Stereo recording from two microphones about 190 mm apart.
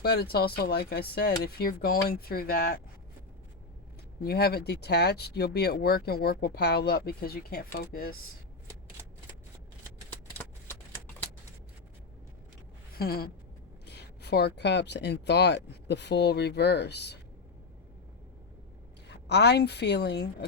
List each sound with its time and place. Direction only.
0.0 s speech: 55° left (ahead or behind)
4.2 s speech: 55° left (ahead or behind)
12.9 s speech: 55° left (ahead or behind)
19.1 s speech: 60° left (ahead or behind)